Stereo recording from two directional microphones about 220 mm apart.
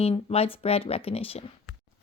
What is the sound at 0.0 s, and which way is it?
Speech, 25° left (ahead or behind).